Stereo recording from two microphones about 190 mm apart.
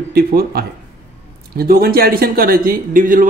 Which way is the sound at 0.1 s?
55° right (ahead or behind).